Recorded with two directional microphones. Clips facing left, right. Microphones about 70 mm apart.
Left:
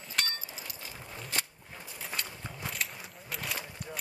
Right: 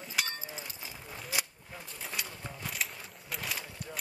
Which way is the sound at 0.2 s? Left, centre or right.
Centre.